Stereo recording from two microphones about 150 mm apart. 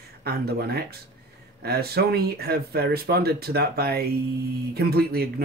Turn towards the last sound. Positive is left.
turn(degrees=-90)